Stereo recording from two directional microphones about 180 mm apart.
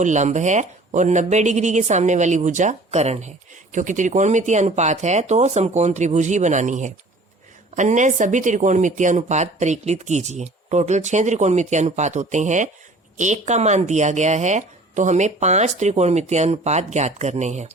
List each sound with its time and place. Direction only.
0.0 s speech: 40° right (ahead or behind)